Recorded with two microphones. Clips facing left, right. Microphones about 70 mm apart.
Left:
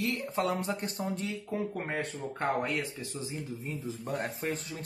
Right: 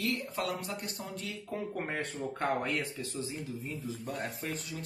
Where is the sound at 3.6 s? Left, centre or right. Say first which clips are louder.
Left 1 dB; left.